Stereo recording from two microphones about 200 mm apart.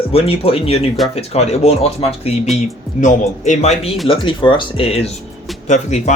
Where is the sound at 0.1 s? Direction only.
30° left (ahead or behind).